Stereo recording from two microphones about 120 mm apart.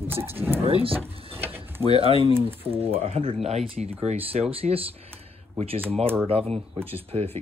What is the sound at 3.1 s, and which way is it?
Speech, 55° right (ahead or behind).